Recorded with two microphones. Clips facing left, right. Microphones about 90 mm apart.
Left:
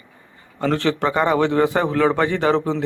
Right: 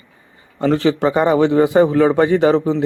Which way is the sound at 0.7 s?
10° right (ahead or behind).